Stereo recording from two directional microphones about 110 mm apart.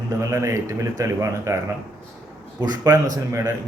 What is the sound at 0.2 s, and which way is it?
A man's voice, 25° right (ahead or behind).